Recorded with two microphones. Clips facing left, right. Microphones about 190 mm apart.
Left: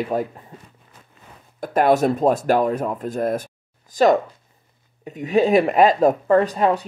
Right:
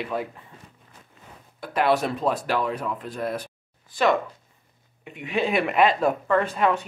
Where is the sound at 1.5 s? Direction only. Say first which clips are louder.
Left 5 dB; 45° left (ahead or behind).